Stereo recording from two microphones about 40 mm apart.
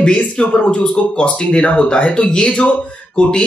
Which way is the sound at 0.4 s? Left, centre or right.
Left.